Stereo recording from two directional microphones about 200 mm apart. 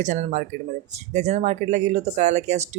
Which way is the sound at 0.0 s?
35° right (ahead or behind).